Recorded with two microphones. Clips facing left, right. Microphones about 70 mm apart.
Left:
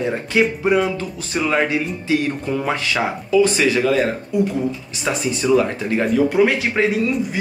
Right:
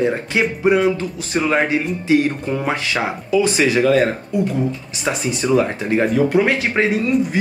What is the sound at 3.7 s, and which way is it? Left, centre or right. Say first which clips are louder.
Speech: right 2 dB; centre.